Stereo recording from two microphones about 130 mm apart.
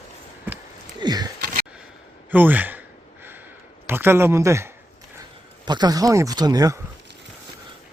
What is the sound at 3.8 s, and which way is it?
Speech, 15° right (ahead or behind).